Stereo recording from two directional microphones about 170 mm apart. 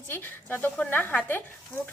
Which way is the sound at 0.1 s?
10° left (ahead or behind).